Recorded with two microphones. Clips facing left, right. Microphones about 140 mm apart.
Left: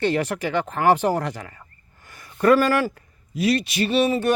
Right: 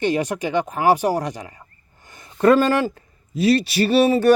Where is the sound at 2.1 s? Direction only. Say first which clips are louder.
Right 2 dB; 25° right (ahead or behind).